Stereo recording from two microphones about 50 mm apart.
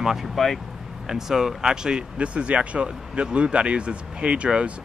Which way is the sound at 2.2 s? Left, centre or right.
Right.